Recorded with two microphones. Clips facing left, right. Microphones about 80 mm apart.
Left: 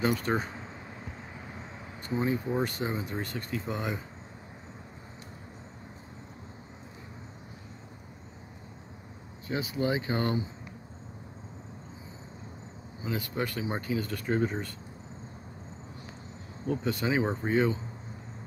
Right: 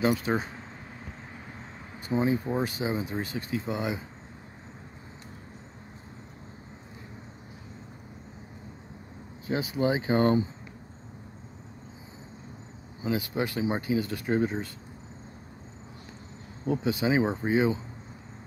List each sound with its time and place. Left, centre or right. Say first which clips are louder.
0.0 s speech: right 2 dB; centre
2.0 s speech: right 3 dB; centre
9.5 s speech: right 3 dB; right
13.1 s speech: right 3 dB; centre
16.6 s speech: right 3 dB; right
16.9 s speech: right 4 dB; centre